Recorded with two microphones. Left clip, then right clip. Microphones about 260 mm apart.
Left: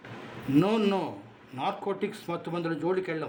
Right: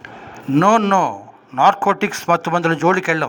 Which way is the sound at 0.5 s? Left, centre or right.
Right.